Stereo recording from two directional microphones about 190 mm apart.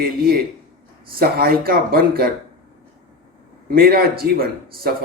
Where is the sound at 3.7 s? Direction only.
50° right (ahead or behind).